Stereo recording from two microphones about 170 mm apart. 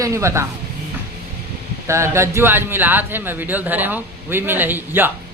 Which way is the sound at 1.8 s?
15° right (ahead or behind).